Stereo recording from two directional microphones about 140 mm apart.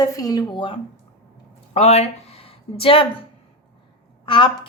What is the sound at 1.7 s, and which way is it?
Speech, 50° left (ahead or behind).